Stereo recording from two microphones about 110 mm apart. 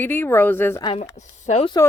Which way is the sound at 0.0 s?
20° left (ahead or behind).